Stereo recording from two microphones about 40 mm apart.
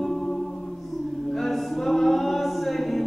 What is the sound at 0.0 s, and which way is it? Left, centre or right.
Music, centre.